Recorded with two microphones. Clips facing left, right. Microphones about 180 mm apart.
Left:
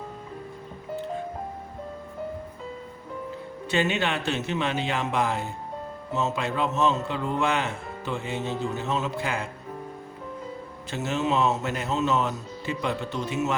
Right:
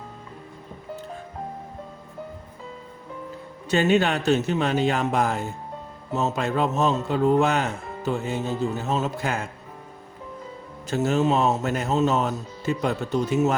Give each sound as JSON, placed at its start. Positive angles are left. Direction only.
{"t": 3.7, "sound": "a man's voice", "side_deg": -45}
{"t": 10.8, "sound": "speech", "side_deg": -40}